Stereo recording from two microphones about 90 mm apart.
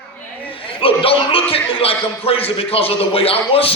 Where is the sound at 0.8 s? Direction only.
85° left.